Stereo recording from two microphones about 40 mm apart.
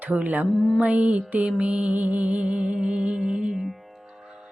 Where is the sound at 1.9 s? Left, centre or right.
Right.